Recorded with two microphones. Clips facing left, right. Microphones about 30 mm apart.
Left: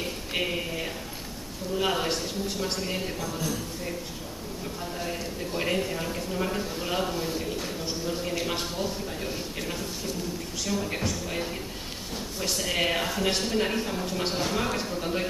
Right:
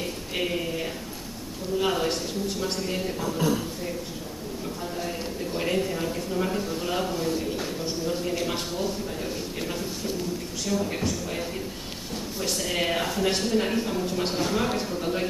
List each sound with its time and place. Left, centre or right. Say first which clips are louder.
0.3 s a sound: right 1 dB; centre
1.8 s speech: right 1 dB; centre
3.2 s a man's voice: right 5 dB; right
5.6 s a man's voice: right 2 dB; centre
7.6 s a sound: right 2 dB; centre
10.7 s speech: right 3 dB; centre